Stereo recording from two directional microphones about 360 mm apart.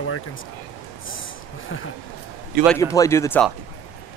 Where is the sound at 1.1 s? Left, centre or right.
Left.